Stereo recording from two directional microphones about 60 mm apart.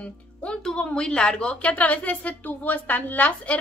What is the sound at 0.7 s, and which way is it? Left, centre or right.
A woman's voice, centre.